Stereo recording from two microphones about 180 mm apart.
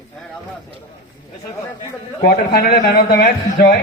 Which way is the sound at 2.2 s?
60° left (ahead or behind).